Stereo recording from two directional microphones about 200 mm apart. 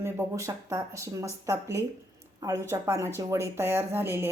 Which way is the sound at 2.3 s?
15° right (ahead or behind).